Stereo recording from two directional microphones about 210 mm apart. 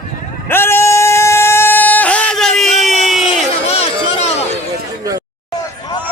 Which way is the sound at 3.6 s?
30° left (ahead or behind).